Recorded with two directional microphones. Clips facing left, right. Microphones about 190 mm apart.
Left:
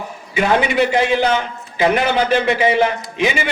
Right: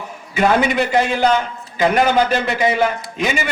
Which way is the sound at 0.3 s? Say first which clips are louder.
Even; 45° right (ahead or behind).